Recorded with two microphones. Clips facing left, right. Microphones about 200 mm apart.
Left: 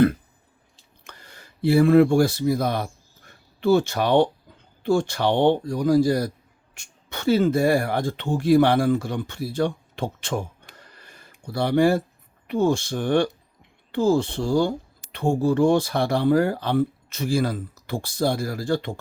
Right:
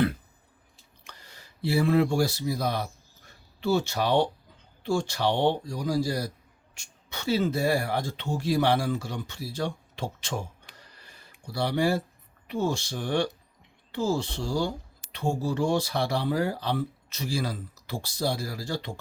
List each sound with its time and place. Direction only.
1.0 s speech: 55° left (ahead or behind)